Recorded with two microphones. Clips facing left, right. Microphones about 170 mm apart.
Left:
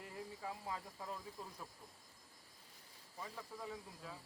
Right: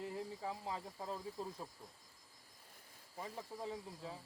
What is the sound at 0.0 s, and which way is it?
Speech, 25° right (ahead or behind).